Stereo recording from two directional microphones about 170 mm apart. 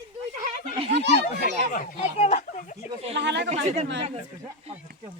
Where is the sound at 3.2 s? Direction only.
90° right.